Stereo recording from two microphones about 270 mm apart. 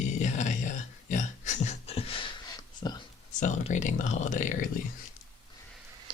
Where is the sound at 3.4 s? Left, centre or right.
Left.